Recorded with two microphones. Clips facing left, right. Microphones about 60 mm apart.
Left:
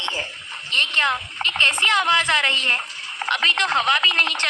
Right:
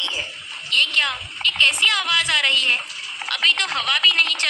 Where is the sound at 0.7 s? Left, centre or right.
Left.